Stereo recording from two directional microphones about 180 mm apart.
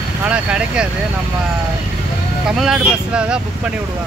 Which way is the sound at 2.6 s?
5° right (ahead or behind).